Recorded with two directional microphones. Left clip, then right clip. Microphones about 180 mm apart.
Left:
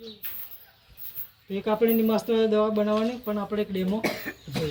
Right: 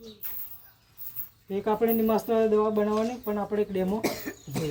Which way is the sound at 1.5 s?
30° right (ahead or behind).